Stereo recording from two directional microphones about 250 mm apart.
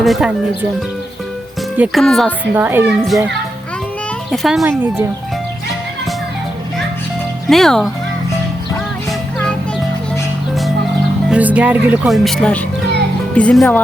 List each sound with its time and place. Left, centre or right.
0.0 s speech: centre
1.7 s a child's voice: centre
4.3 s speech: centre
7.4 s speech: centre
11.3 s speech: centre